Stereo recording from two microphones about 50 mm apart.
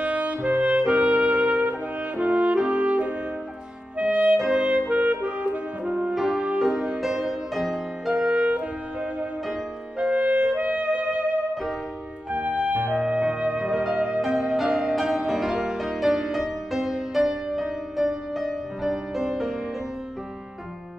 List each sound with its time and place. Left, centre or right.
0.0 s music: right
4.0 s clarinet: right
4.6 s music: right
6.1 s music: centre
8.1 s music: right
9.9 s music: right
13.9 s music: right
14.2 s music: centre